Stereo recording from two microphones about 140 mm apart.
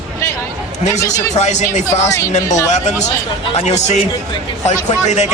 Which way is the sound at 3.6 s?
55° left (ahead or behind).